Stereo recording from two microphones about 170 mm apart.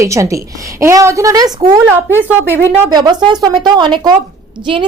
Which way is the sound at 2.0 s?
10° right (ahead or behind).